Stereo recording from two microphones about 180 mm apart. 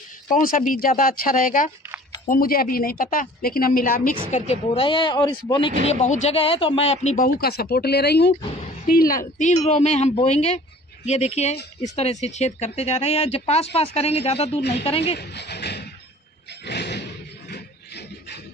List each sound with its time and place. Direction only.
0.3 s speech: 45° left (ahead or behind)
4.3 s speech: 40° left (ahead or behind)
5.8 s speech: 40° left (ahead or behind); by 8.3 s 65° left (ahead or behind)
8.9 s speech: 55° left (ahead or behind); by 14.6 s 35° left (ahead or behind)
14.6 s speech: 65° left (ahead or behind)
14.8 s speech: 35° left (ahead or behind)
15.2 s speech: 70° left (ahead or behind)
16.5 s a sound: 70° left (ahead or behind)